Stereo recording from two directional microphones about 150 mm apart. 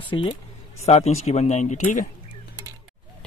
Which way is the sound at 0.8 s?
45° left (ahead or behind).